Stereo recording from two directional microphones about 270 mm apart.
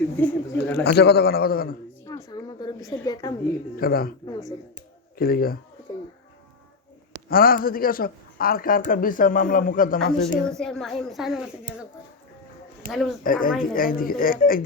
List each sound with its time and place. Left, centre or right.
0.2 s speech: centre
0.9 s speech: left
2.0 s a sound: centre
3.8 s speech: left
4.3 s speech: centre
5.1 s speech: left
7.3 s speech: left
10.6 s speech: centre
12.9 s speech: centre
13.2 s speech: left